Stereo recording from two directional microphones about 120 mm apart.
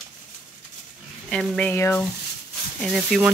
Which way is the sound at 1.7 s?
20° left (ahead or behind).